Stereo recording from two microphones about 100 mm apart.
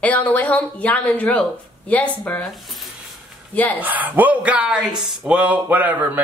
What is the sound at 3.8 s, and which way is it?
Speech, 15° right (ahead or behind).